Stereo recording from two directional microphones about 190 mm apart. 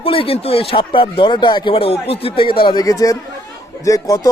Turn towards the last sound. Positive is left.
turn(degrees=20)  # may be behind; listen again after turning